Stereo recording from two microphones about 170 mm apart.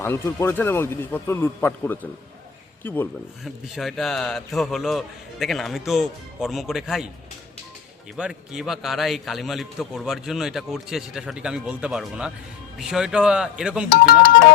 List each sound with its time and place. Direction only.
0.0 s speech: 15° left (ahead or behind)
3.4 s a man's voice: centre (ahead or behind)
8.1 s a man's voice: 5° right (ahead or behind)
13.9 s speech: 60° left (ahead or behind)